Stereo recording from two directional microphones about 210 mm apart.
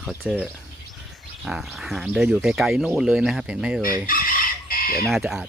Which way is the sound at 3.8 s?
45° left (ahead or behind).